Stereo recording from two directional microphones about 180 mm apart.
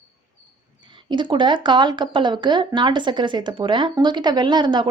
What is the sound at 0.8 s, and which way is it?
A woman's voice, 25° right (ahead or behind).